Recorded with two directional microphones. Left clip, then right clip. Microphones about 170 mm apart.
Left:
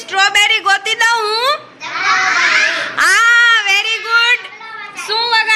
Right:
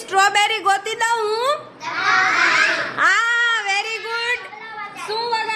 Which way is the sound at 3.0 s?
10° right (ahead or behind).